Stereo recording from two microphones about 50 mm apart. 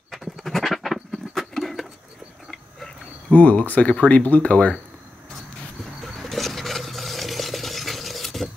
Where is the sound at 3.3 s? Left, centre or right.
Left.